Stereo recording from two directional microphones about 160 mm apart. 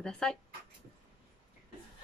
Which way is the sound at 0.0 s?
5° left (ahead or behind).